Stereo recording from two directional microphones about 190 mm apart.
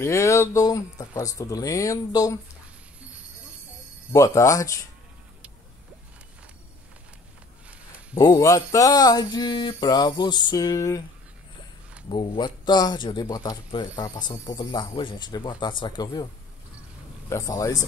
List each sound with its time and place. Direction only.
0.0 s speech: 15° left (ahead or behind)
4.1 s speech: 15° left (ahead or behind)
8.1 s speech: 20° left (ahead or behind)
12.1 s speech: 25° left (ahead or behind)
17.3 s speech: 15° left (ahead or behind)